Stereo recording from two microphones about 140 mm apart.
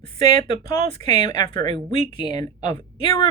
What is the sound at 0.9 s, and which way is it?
Speech, 30° left (ahead or behind).